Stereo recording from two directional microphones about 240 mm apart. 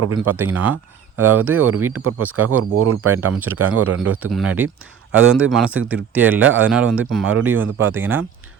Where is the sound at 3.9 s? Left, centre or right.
Right.